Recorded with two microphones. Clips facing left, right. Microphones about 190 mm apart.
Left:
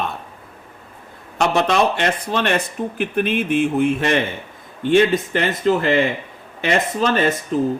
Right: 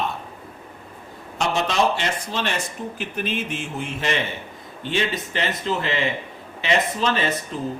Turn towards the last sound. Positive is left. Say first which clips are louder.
# left 7 dB
turn(degrees=45)  # may be behind; listen again after turning